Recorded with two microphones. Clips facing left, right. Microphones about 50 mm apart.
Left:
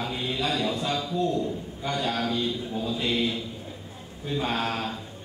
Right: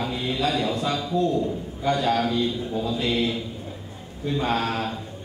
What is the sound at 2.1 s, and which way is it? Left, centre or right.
A man's voice, centre.